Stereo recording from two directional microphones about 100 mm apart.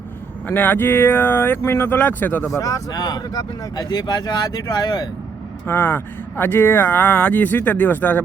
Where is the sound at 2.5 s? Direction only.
35° left (ahead or behind).